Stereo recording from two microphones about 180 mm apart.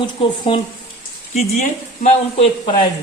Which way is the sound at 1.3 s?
40° left (ahead or behind).